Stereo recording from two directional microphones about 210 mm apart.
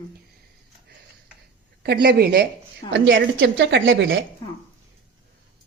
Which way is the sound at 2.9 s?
60° right (ahead or behind).